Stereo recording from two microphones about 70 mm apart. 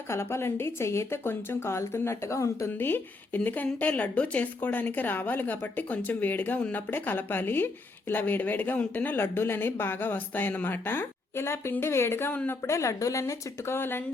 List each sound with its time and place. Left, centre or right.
0.1 s a woman's voice: left
2.7 s speech: left
6.9 s a woman's voice: left